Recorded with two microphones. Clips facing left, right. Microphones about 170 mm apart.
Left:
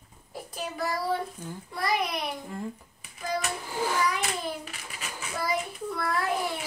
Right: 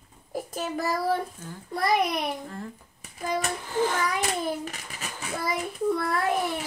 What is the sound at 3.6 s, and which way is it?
Speech, 10° left (ahead or behind).